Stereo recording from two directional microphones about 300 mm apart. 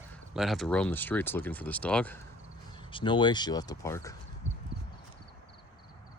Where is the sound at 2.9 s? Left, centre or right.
Centre.